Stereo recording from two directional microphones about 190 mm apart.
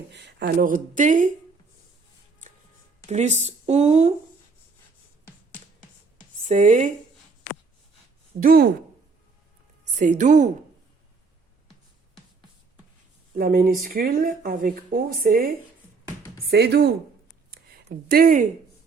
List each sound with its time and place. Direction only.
0.1 s speech: 65° right (ahead or behind)
0.6 s speech: 45° right (ahead or behind)
3.1 s speech: 35° right (ahead or behind)
6.5 s speech: 40° right (ahead or behind)
8.4 s speech: 50° right (ahead or behind)
9.9 s speech: 40° right (ahead or behind)
13.3 s speech: 50° right (ahead or behind)
16.5 s speech: 60° right (ahead or behind)
17.5 s a sound: 55° right (ahead or behind)